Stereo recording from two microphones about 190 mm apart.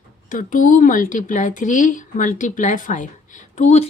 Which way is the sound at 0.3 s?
45° left (ahead or behind).